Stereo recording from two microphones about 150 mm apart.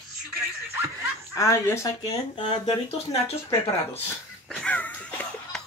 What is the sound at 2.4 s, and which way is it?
Speech, 35° left (ahead or behind).